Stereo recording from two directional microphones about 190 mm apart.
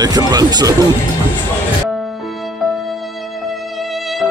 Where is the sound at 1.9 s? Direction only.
Centre (ahead or behind).